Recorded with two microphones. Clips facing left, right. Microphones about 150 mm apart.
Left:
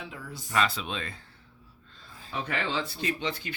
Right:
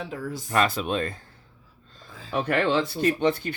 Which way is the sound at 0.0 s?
45° right (ahead or behind).